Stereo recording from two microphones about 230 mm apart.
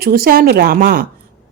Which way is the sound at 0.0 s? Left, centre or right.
Right.